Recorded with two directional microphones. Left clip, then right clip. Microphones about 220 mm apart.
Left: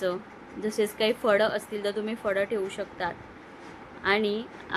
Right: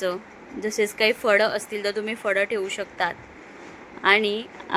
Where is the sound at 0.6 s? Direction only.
25° right (ahead or behind).